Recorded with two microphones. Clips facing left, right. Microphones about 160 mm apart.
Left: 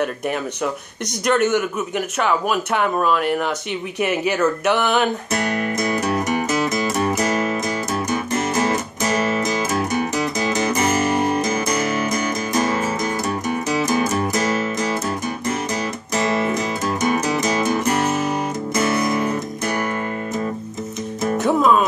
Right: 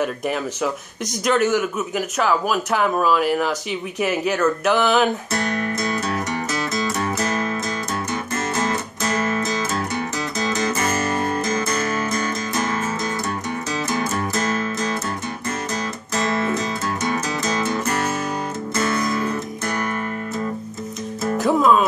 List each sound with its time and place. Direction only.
1.2 s speech: centre (ahead or behind)
5.3 s music: 15° left (ahead or behind)
16.2 s music: 15° left (ahead or behind)
21.4 s music: centre (ahead or behind)